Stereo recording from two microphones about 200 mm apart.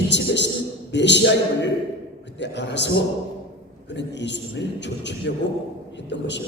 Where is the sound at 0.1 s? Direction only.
60° left (ahead or behind).